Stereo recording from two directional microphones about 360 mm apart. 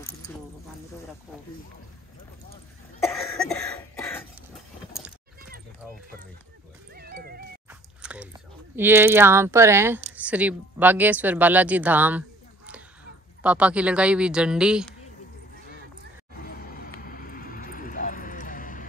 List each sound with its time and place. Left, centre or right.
3.3 s cough: centre
7.0 s cat: right
8.0 s biting: centre
8.7 s a woman's voice: centre
16.3 s music: left
17.0 s vehicle: left